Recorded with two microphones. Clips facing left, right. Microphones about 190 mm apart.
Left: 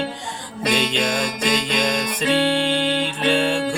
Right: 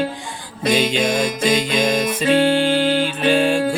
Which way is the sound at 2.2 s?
40° right (ahead or behind).